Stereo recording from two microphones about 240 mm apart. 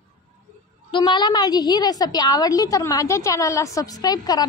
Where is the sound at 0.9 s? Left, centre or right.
Centre.